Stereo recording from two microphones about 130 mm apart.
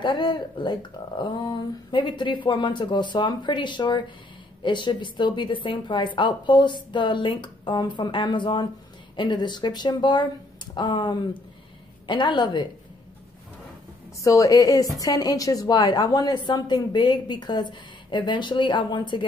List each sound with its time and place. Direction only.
0.0 s a woman's voice: 40° left (ahead or behind)
14.2 s a woman's voice: 25° left (ahead or behind)